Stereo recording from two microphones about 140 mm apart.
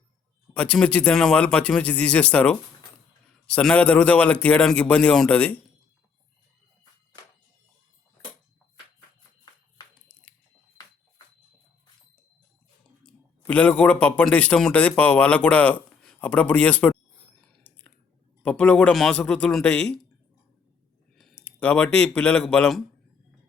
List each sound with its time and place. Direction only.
0.5 s a man's voice: 10° left (ahead or behind)
13.1 s a man's voice: 10° left (ahead or behind)
17.4 s whispering: 10° left (ahead or behind)
18.4 s a man's voice: 5° left (ahead or behind)
21.2 s speech: 5° left (ahead or behind)